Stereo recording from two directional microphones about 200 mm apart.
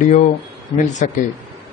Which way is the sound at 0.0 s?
35° left (ahead or behind).